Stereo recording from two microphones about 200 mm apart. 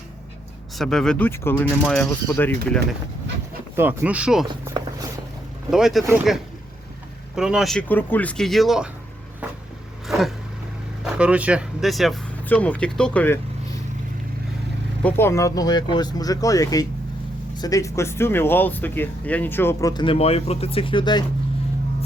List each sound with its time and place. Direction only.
0.8 s speech: centre (ahead or behind)
3.8 s speech: 10° right (ahead or behind)
4.4 s a sound: 20° right (ahead or behind)
5.7 s speech: centre (ahead or behind)
9.4 s vehicle: 5° right (ahead or behind)
11.0 s speech: 5° right (ahead or behind)
15.0 s speech: 10° left (ahead or behind)